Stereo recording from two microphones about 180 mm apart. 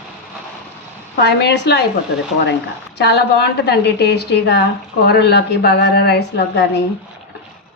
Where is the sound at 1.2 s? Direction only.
70° left (ahead or behind).